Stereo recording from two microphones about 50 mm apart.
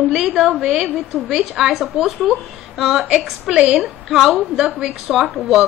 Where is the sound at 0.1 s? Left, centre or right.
Centre.